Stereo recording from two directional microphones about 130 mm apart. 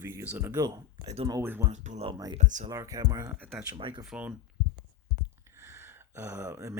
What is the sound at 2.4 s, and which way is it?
Speech, 70° right (ahead or behind).